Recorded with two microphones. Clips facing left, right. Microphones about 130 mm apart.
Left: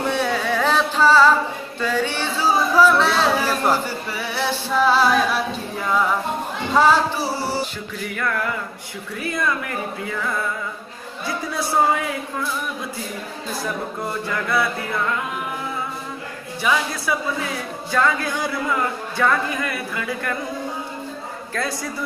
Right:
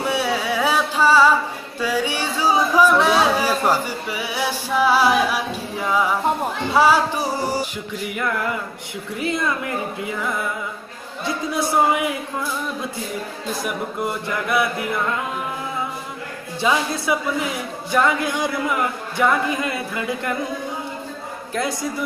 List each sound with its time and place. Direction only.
0.0 s carnatic music: 10° right (ahead or behind)
1.8 s speech: 10° right (ahead or behind)
13.7 s speech: 15° right (ahead or behind)
16.6 s speech: 25° right (ahead or behind)